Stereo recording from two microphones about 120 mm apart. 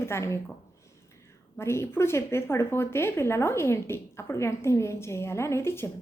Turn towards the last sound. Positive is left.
turn(degrees=20)  # may be behind; listen again after turning